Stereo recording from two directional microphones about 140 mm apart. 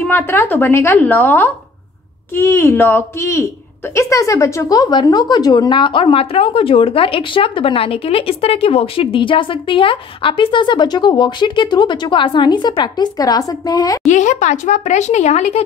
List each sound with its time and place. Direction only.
0.1 s a woman's voice: 15° left (ahead or behind)
14.0 s speech: 60° left (ahead or behind)